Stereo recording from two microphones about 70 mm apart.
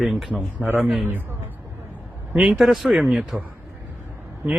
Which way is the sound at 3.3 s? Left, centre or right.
Right.